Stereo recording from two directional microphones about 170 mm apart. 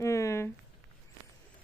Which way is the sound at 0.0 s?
15° left (ahead or behind).